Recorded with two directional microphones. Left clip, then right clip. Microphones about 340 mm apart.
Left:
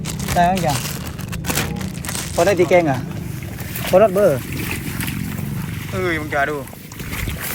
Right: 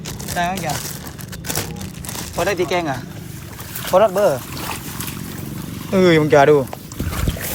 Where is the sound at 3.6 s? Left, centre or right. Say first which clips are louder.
Left 1 dB; left.